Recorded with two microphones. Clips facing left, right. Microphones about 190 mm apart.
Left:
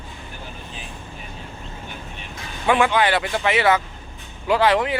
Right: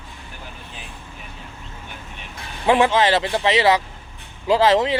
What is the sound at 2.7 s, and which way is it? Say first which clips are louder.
Speech: right 2 dB; 25° right (ahead or behind).